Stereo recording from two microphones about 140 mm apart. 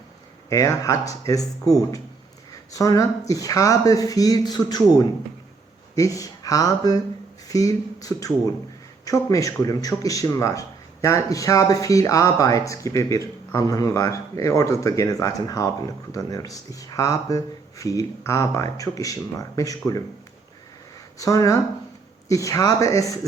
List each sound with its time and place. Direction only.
0.5 s speech: 25° left (ahead or behind)
2.7 s speech: 25° left (ahead or behind)
21.2 s speech: 25° left (ahead or behind)